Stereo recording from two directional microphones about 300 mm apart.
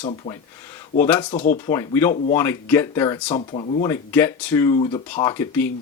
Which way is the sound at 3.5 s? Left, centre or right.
Centre.